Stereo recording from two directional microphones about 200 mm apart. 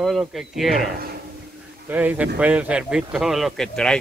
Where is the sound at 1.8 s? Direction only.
10° right (ahead or behind).